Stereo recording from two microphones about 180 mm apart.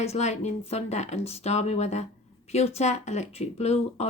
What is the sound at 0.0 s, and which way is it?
Speech, 35° left (ahead or behind).